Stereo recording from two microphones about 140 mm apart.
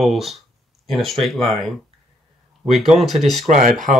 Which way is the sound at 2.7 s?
Centre (ahead or behind).